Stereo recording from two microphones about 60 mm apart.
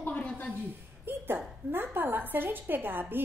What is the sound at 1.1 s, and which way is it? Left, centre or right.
A woman's voice, right.